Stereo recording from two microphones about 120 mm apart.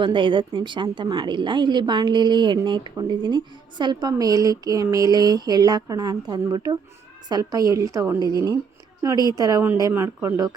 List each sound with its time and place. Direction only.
0.0 s a woman's voice: 45° right (ahead or behind)
9.9 s a woman's voice: 20° right (ahead or behind)